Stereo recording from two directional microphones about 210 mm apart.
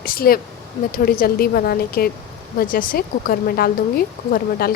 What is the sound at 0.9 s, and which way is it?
Speech, 45° left (ahead or behind).